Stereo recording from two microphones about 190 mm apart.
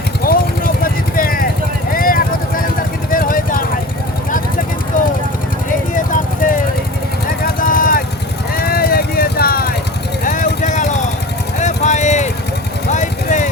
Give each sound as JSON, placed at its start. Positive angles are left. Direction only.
{"t": 0.3, "sound": "vehicle", "side_deg": 50}
{"t": 7.6, "sound": "vehicle", "side_deg": 50}
{"t": 10.2, "sound": "vehicle", "side_deg": 45}
{"t": 11.6, "sound": "a sound", "side_deg": 40}
{"t": 12.9, "sound": "vehicle", "side_deg": 40}